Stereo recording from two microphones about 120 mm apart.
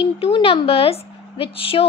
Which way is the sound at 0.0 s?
50° left (ahead or behind).